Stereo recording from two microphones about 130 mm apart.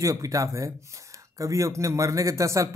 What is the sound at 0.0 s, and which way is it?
Speech, 25° right (ahead or behind).